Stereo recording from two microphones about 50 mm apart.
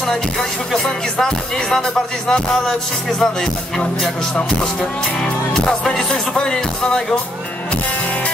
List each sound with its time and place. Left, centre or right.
0.8 s music: centre
1.8 s speech: centre
5.2 s speech: centre